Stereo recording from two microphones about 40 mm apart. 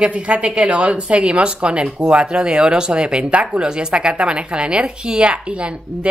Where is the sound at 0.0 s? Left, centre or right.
Right.